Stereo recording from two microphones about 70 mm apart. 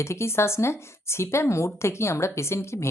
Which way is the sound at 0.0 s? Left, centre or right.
Left.